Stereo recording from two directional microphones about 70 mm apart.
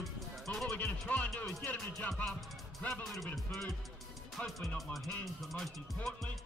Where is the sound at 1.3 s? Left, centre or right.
Centre.